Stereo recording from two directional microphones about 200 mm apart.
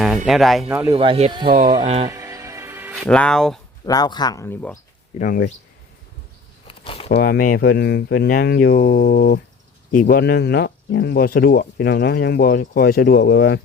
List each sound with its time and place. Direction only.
0.3 s speech: centre (ahead or behind)
0.9 s speech: 30° right (ahead or behind)
2.0 s music: 15° right (ahead or behind)
2.9 s speech: 5° left (ahead or behind)
3.8 s speech: 20° left (ahead or behind)
5.2 s speech: 45° left (ahead or behind)
6.7 s a sound: 25° left (ahead or behind)
7.1 s speech: 50° left (ahead or behind)